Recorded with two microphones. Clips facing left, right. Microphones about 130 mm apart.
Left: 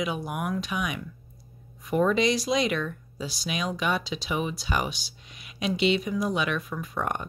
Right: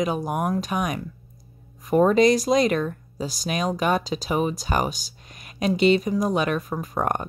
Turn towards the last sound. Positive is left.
turn(degrees=-45)  # may be behind; listen again after turning